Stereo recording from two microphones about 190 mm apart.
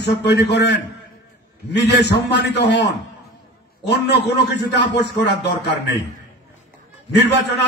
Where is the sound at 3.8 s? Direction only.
60° left (ahead or behind).